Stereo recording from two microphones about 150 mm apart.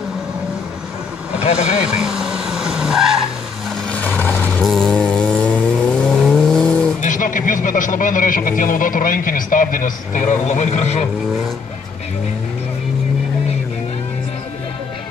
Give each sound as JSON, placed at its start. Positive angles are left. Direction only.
{"t": 1.4, "sound": "speech", "side_deg": 45}
{"t": 2.0, "sound": "vehicle", "side_deg": -5}
{"t": 3.9, "sound": "vehicle", "side_deg": 15}
{"t": 7.0, "sound": "a man's voice", "side_deg": 60}